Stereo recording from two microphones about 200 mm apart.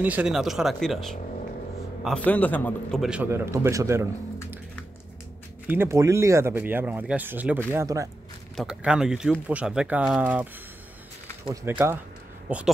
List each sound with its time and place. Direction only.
0.0 s a man's voice: 5° right (ahead or behind)
5.7 s speech: 15° right (ahead or behind)
8.5 s a man's voice: 5° right (ahead or behind)
11.5 s speech: 10° right (ahead or behind)